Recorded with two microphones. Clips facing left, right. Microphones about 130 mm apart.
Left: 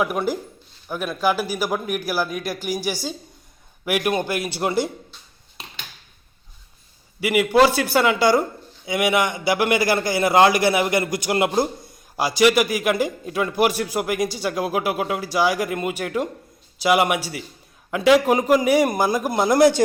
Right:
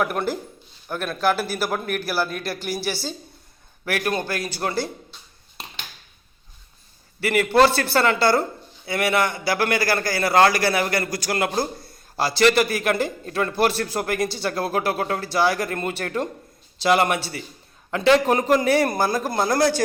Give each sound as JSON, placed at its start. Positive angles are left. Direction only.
{"t": 0.0, "sound": "a man's voice", "side_deg": 10}
{"t": 7.2, "sound": "a man's voice", "side_deg": 10}